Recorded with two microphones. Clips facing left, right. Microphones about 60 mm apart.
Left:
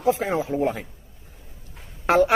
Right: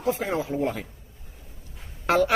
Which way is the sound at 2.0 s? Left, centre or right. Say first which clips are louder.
Left 3 dB; left.